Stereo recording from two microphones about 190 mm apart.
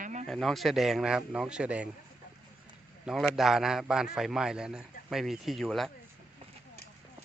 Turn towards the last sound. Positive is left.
turn(degrees=0)  # may be behind; listen again after turning